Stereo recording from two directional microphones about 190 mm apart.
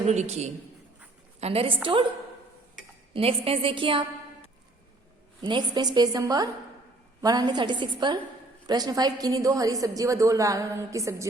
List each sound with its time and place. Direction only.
0.1 s a man's voice: 35° right (ahead or behind)
3.1 s a woman's voice: 30° right (ahead or behind)
5.4 s a woman's voice: 25° right (ahead or behind)